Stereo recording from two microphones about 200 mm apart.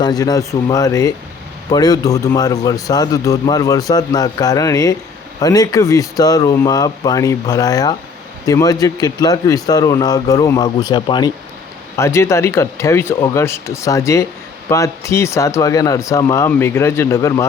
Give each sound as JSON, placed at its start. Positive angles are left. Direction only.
{"t": 0.0, "sound": "a man's voice", "side_deg": 20}